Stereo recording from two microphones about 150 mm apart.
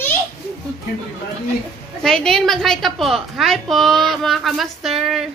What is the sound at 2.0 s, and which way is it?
A woman's voice, 5° left (ahead or behind).